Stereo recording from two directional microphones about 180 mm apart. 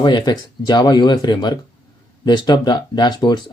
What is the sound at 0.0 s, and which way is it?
Speech, 25° left (ahead or behind).